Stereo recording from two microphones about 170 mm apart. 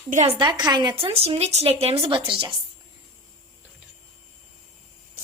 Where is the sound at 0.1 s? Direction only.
40° right (ahead or behind).